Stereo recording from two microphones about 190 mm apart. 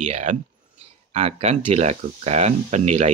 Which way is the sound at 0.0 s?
40° right (ahead or behind).